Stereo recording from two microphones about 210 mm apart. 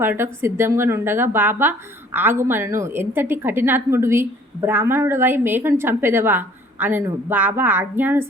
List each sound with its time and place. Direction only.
0.0 s a woman's voice: 10° right (ahead or behind)